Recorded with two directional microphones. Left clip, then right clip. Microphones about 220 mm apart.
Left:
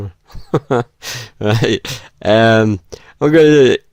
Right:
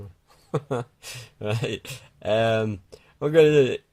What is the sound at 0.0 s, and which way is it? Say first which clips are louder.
Speech: left 15 dB; 40° left (ahead or behind).